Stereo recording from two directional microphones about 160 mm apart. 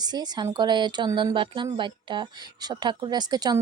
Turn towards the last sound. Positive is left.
turn(degrees=-25)  # may be behind; listen again after turning